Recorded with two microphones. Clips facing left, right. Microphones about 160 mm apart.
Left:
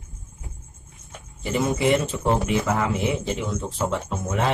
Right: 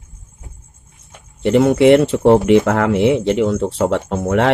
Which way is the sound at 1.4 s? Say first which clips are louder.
Right 11 dB; 70° right (ahead or behind).